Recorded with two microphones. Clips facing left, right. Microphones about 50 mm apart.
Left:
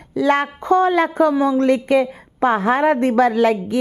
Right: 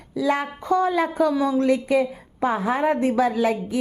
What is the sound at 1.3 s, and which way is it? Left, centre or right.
A woman's voice, left.